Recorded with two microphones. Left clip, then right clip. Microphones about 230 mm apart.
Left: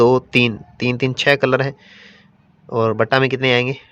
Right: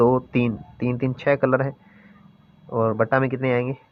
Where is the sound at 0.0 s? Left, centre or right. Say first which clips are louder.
Left 6 dB; left.